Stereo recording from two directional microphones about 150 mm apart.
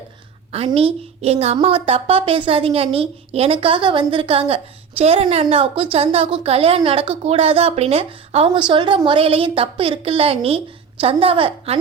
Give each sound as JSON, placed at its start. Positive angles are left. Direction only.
{"t": 0.5, "sound": "a woman's voice", "side_deg": -40}